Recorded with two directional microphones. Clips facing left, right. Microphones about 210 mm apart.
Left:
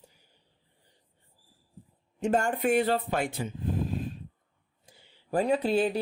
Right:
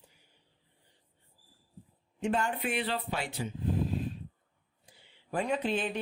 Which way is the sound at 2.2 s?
45° left (ahead or behind).